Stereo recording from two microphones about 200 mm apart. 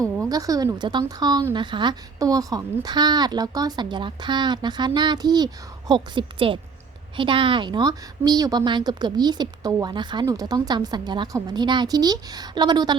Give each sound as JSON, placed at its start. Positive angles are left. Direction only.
{"t": 0.3, "sound": "a woman's voice", "side_deg": -20}